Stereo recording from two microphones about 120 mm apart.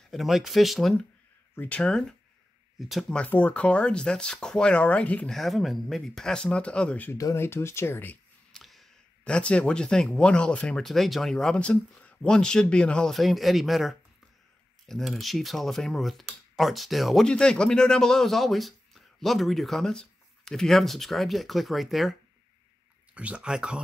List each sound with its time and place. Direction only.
0.1 s speech: centre (ahead or behind)
1.5 s speech: 15° left (ahead or behind)
3.2 s speech: 15° left (ahead or behind)
7.2 s speech: 25° left (ahead or behind)
8.5 s speech: 5° left (ahead or behind)
23.1 s speech: 10° right (ahead or behind)